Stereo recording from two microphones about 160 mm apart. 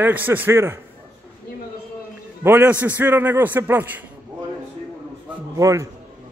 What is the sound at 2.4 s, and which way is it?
A man's voice, 15° right (ahead or behind).